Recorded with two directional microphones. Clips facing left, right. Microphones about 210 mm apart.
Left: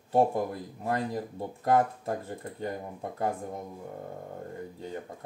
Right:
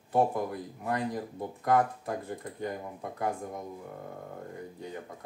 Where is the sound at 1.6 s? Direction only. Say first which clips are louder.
Left 1 dB; 30° left (ahead or behind).